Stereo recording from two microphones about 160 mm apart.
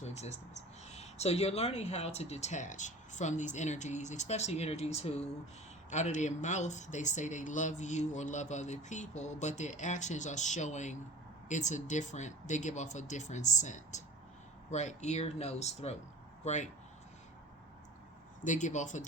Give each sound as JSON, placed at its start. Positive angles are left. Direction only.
{"t": 0.0, "sound": "speech", "side_deg": 45}
{"t": 18.4, "sound": "speech", "side_deg": 50}